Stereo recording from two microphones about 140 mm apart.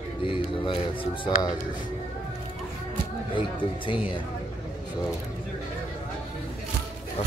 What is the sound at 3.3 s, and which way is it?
Speech, 35° left (ahead or behind).